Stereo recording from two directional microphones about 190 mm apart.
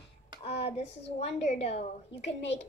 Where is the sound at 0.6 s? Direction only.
30° left (ahead or behind).